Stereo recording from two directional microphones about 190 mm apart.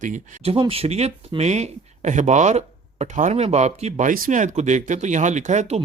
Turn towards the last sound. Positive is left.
turn(degrees=-35)  # may be behind; listen again after turning